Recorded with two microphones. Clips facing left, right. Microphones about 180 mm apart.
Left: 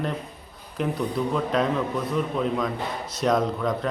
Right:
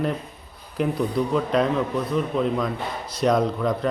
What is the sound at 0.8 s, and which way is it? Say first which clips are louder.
A man's voice: right 3 dB; centre (ahead or behind).